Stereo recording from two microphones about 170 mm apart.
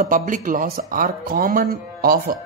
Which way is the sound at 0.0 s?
50° right (ahead or behind).